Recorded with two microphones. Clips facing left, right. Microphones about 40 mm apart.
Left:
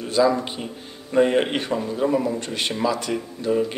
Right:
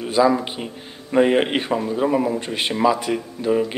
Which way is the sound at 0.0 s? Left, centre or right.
Centre.